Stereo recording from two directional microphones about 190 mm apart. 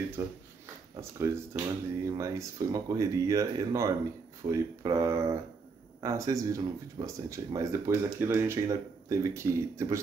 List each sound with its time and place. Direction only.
0.2 s speech: 15° right (ahead or behind)